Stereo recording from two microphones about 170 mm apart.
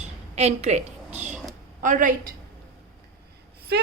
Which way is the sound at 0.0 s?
40° right (ahead or behind).